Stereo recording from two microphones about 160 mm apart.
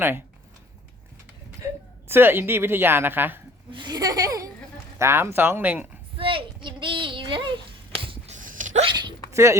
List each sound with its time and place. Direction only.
2.0 s a woman's voice: 15° right (ahead or behind)
3.7 s a woman's voice: 30° right (ahead or behind); by 5.9 s 10° right (ahead or behind)
6.1 s a sound: 35° right (ahead or behind)
8.4 s a sound: 55° right (ahead or behind)
8.8 s hiccup: 30° right (ahead or behind)
9.3 s speech: 20° right (ahead or behind)